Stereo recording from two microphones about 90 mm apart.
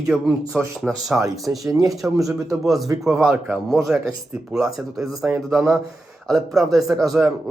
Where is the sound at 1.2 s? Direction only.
40° right (ahead or behind).